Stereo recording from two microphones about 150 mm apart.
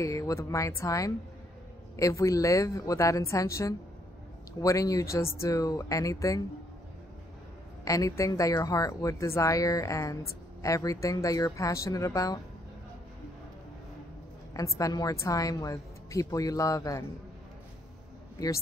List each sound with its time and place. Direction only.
0.0 s a woman's voice: 20° left (ahead or behind)
7.8 s a woman's voice: 20° left (ahead or behind)
14.5 s a woman's voice: 20° left (ahead or behind)